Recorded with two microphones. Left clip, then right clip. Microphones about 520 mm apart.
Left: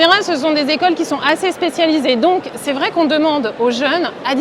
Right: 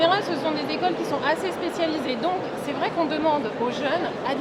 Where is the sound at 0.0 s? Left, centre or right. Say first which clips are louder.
Left 9 dB; left.